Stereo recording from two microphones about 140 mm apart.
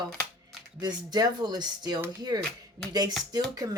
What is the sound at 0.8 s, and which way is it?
A woman's voice, 30° right (ahead or behind).